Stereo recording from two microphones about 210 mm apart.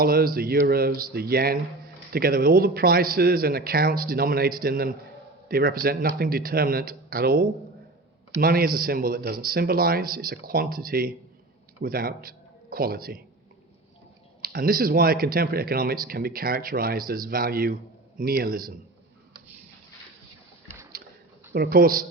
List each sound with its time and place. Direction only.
0.0 s speech: 45° right (ahead or behind)
14.4 s speech: 45° right (ahead or behind)
21.5 s speech: 45° right (ahead or behind)